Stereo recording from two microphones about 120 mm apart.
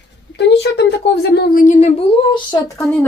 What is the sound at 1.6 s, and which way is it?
Speech, 80° left.